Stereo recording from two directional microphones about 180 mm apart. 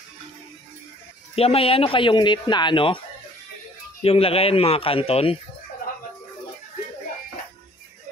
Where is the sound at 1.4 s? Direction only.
30° left (ahead or behind).